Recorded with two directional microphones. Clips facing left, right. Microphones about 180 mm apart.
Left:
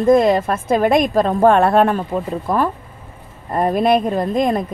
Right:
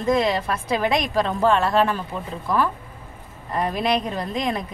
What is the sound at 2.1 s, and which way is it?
A woman's voice, 45° left (ahead or behind).